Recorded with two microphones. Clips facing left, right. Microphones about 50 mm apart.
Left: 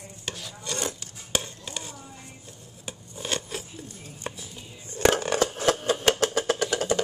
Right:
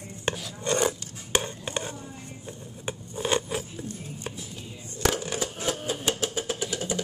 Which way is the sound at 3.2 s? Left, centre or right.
Centre.